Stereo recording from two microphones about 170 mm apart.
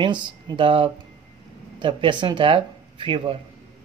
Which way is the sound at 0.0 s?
25° right (ahead or behind).